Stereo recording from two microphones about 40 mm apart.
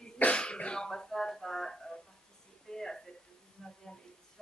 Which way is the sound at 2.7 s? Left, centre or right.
Centre.